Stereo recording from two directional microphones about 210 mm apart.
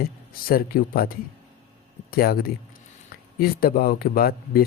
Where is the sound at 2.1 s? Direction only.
45° left (ahead or behind).